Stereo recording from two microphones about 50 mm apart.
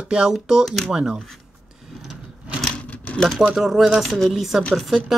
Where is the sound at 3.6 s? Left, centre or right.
Centre.